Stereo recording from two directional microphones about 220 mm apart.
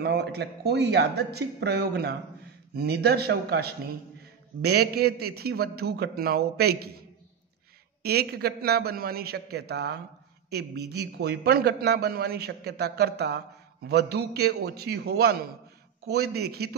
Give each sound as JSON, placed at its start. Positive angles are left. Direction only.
{"t": 0.0, "sound": "a man's voice", "side_deg": -50}
{"t": 8.0, "sound": "a man's voice", "side_deg": -45}